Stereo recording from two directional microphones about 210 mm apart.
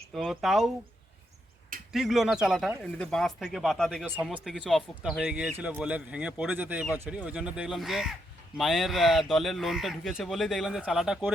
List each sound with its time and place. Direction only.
0.1 s speech: centre (ahead or behind)
1.9 s speech: centre (ahead or behind)